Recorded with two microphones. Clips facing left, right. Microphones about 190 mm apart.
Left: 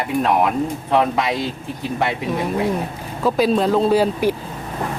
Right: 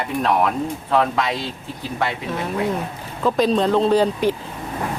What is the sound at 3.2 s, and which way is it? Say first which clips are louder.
Speech: left 1 dB; 5° left (ahead or behind).